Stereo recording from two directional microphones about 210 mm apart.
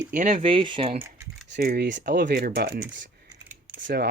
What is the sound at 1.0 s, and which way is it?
Speech, 15° right (ahead or behind).